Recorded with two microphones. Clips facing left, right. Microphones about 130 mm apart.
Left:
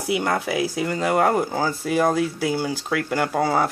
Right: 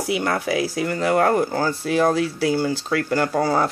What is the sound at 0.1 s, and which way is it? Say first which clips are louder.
Speech: even; 20° left (ahead or behind).